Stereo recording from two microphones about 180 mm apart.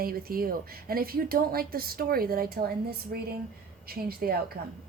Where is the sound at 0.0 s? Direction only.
55° right (ahead or behind).